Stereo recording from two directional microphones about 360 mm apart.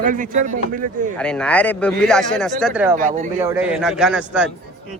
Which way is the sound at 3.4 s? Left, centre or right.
Centre.